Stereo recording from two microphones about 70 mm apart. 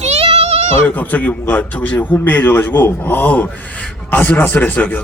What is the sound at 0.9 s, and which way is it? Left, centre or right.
A man's voice, left.